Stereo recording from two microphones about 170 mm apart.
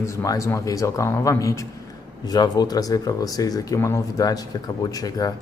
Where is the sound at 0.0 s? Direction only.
20° left (ahead or behind).